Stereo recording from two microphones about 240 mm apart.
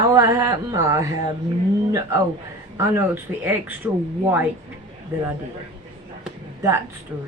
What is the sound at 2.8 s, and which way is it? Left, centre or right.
A woman's voice, centre.